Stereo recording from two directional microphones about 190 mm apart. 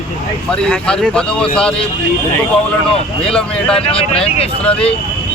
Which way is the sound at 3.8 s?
30° left (ahead or behind).